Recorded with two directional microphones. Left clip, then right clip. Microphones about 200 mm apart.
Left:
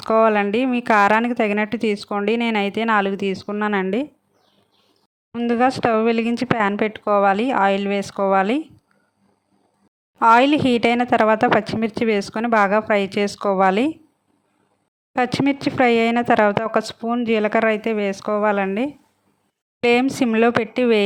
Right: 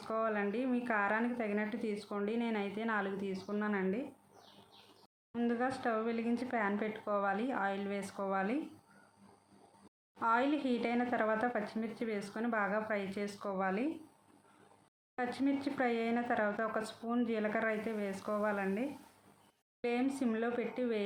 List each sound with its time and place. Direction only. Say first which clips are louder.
0.0 s speech: left 19 dB; 50° left (ahead or behind)
5.3 s speech: left 17 dB; 45° left (ahead or behind)
10.2 s speech: left 19 dB; 50° left (ahead or behind)
15.2 s speech: left 16 dB; 45° left (ahead or behind)